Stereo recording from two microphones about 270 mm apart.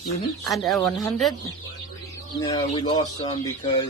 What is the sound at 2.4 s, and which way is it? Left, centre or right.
Speech, centre.